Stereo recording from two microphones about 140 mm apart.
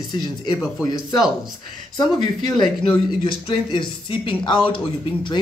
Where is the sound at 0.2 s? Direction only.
30° left (ahead or behind).